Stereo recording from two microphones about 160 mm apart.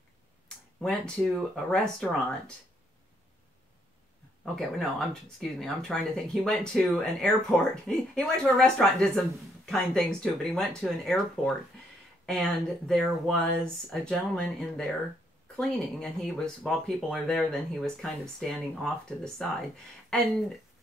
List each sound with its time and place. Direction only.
0.7 s speech: 5° left (ahead or behind)
4.6 s speech: centre (ahead or behind)